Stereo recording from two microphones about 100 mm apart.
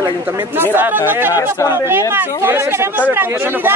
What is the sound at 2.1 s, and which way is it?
A man's voice, 25° right (ahead or behind).